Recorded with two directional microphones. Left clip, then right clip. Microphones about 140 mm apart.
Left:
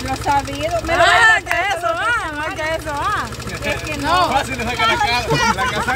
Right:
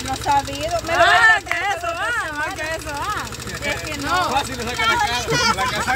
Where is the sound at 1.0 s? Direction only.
90° left.